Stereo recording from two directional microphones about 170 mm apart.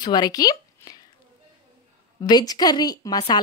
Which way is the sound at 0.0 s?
25° left (ahead or behind).